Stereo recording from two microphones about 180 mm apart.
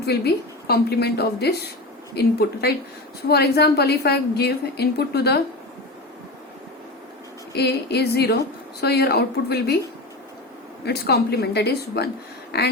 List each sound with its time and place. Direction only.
0.0 s a woman's voice: 65° left (ahead or behind)
7.5 s a woman's voice: 65° left (ahead or behind)
10.8 s a woman's voice: 65° left (ahead or behind)